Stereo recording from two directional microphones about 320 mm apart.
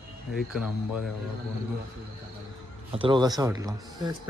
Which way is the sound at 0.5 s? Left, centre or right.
Centre.